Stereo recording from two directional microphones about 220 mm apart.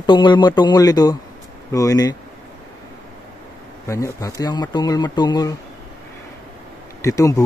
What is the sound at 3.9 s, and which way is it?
Speech, 15° left (ahead or behind).